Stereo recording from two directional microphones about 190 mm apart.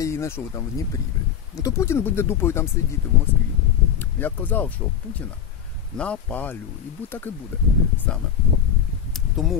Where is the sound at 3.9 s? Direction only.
10° left (ahead or behind).